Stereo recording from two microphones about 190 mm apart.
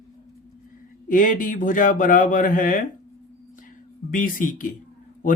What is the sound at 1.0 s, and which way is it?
Speech, 45° left (ahead or behind).